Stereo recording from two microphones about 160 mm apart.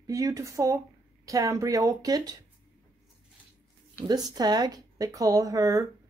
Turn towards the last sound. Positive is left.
turn(degrees=-20)  # may be behind; listen again after turning